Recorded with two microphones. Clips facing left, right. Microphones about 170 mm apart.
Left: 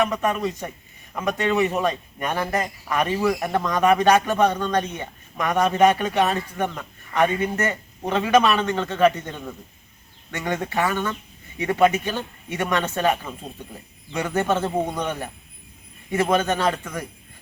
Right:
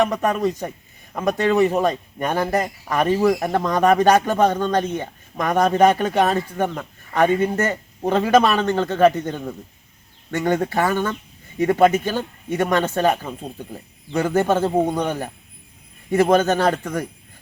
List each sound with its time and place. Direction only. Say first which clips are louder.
0.0 s a man's voice: right 3 dB; 35° right (ahead or behind)